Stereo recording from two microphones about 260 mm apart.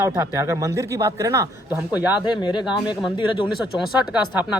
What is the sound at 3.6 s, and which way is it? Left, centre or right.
Speech, centre.